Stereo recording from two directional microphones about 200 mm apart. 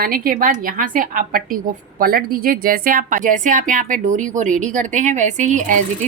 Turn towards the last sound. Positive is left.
turn(degrees=-40)  # may be behind; listen again after turning